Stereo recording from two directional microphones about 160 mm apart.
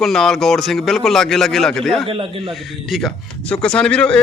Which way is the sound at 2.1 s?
35° right (ahead or behind).